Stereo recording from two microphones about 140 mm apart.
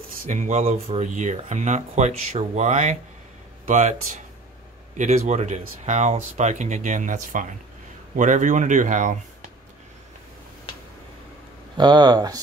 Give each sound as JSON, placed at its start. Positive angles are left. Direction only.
{"t": 0.3, "sound": "speech", "side_deg": -55}
{"t": 11.7, "sound": "speech", "side_deg": -30}